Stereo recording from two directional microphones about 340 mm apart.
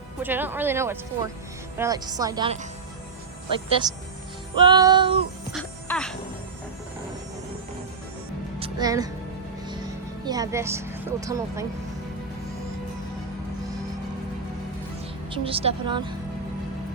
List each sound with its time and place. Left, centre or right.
0.2 s a woman's voice: centre
3.7 s a woman's voice: centre
5.5 s music: centre
8.5 s music: centre
9.6 s speech: centre
15.3 s a woman's voice: centre